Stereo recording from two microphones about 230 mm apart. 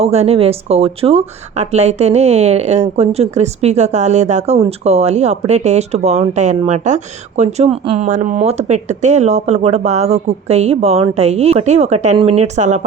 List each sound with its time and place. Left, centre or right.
0.0 s speech: right